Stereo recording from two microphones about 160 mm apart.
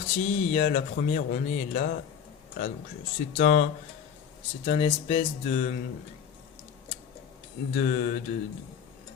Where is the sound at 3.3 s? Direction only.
50° left (ahead or behind).